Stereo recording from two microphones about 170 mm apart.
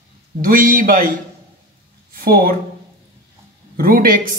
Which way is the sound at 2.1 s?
60° right (ahead or behind).